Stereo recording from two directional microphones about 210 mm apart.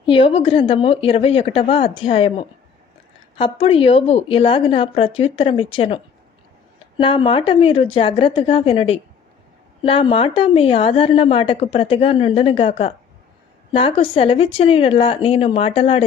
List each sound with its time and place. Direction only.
0.0 s a woman's voice: 25° left (ahead or behind)